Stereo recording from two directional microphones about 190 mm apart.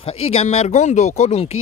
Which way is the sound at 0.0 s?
30° left (ahead or behind).